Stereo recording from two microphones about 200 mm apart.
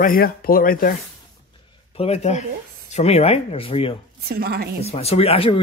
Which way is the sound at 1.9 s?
30° left (ahead or behind).